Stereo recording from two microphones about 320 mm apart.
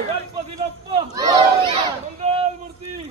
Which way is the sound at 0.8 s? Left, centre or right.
Centre.